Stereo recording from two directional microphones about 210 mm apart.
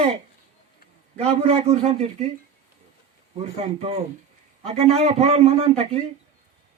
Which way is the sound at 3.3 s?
30° right (ahead or behind).